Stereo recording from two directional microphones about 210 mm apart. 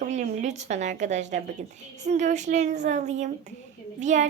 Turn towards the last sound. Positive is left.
turn(degrees=-35)  # may be behind; listen again after turning